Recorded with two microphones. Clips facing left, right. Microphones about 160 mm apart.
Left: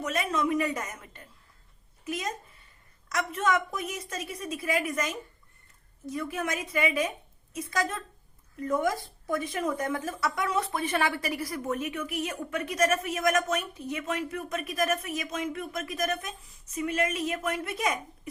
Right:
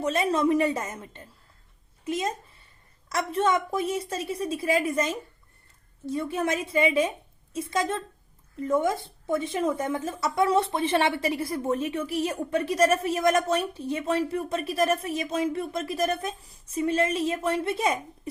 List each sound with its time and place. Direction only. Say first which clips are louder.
0.0 s speech: right 5 dB; 30° right (ahead or behind)